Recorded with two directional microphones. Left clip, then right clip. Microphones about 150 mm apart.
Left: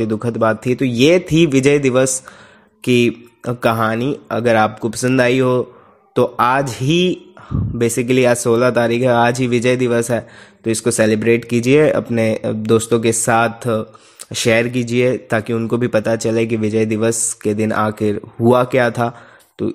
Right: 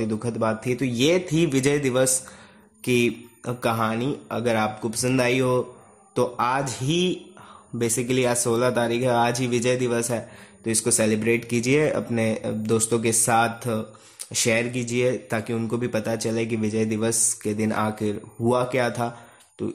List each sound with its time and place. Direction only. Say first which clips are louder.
0.0 s speech: left 9 dB; 30° left (ahead or behind)